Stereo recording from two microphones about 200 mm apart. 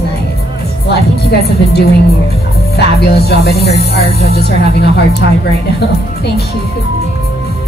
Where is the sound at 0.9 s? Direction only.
55° left (ahead or behind).